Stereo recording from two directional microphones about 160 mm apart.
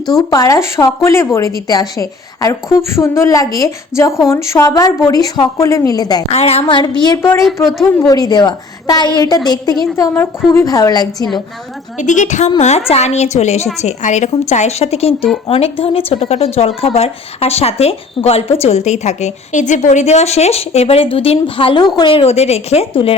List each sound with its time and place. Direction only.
0.1 s a woman's voice: 25° left (ahead or behind)
6.3 s a woman's voice: 40° left (ahead or behind); by 7.3 s 20° left (ahead or behind)
7.4 s a woman's voice: centre (ahead or behind)
7.9 s a woman's voice: 20° left (ahead or behind)
11.9 s a woman's voice: 50° left (ahead or behind)